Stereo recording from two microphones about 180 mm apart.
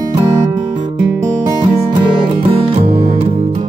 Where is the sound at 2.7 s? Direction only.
35° right (ahead or behind).